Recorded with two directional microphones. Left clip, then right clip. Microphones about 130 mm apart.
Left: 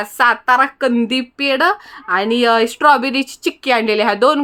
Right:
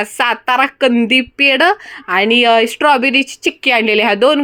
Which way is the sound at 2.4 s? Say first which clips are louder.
Right 1 dB; 25° right (ahead or behind).